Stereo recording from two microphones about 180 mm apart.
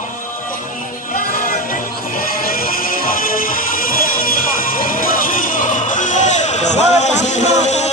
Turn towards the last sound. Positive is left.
turn(degrees=40)  # may be behind; listen again after turning